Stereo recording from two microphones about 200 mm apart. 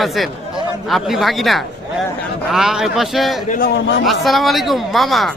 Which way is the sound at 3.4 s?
45° left (ahead or behind).